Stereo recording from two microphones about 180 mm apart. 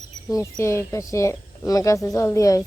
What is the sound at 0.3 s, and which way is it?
Speech, 20° left (ahead or behind).